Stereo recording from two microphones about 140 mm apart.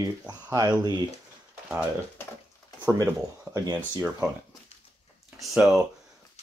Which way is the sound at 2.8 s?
20° right (ahead or behind).